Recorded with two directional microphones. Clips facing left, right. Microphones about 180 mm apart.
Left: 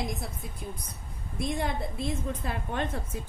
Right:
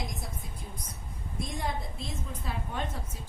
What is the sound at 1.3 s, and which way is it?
A woman's voice, 65° left (ahead or behind).